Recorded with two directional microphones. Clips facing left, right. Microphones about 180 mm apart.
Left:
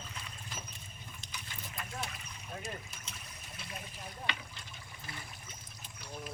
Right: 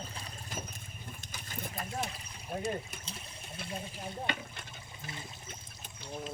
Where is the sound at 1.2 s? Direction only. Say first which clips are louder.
Right 5 dB; 45° right (ahead or behind).